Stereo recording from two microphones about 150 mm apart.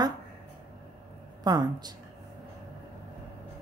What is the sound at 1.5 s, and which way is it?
Speech, 25° right (ahead or behind).